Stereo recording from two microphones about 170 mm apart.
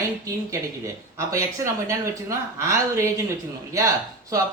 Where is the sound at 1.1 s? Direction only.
15° right (ahead or behind).